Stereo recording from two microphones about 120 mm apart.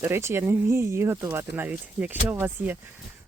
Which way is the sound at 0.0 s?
20° right (ahead or behind).